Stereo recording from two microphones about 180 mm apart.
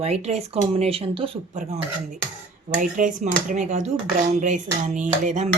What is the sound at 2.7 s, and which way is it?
Speech, 45° right (ahead or behind).